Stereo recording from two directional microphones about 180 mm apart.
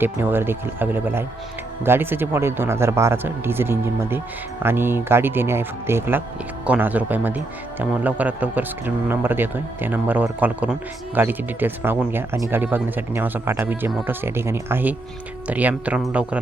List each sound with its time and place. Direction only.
0.0 s speech: 10° right (ahead or behind)